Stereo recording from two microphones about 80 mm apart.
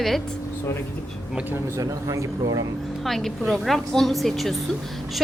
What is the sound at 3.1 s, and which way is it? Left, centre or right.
A woman's voice, centre.